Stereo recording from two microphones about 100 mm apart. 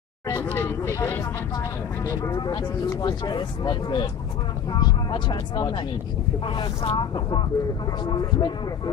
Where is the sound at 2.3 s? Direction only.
45° left (ahead or behind).